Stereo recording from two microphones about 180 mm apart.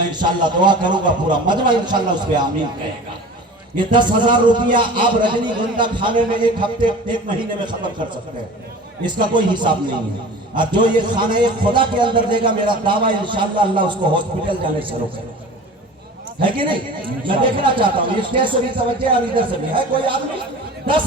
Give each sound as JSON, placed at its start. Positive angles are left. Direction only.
{"t": 0.2, "sound": "a man's voice", "side_deg": -25}
{"t": 3.9, "sound": "a man's voice", "side_deg": -25}
{"t": 9.2, "sound": "a man's voice", "side_deg": -25}
{"t": 16.4, "sound": "a man's voice", "side_deg": -25}